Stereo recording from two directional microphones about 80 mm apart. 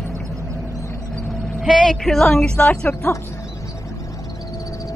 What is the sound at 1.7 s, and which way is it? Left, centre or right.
A woman's voice, centre.